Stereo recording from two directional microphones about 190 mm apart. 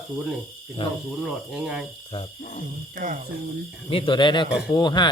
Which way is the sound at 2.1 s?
30° left (ahead or behind).